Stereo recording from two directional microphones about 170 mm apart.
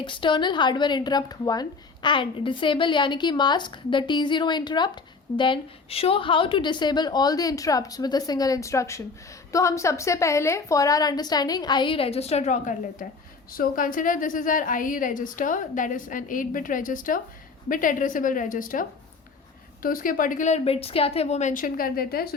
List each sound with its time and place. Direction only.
0.0 s a woman's voice: 30° left (ahead or behind); by 22.4 s 65° left (ahead or behind)